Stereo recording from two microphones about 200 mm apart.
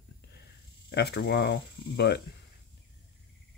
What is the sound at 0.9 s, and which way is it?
Speech, 55° left (ahead or behind).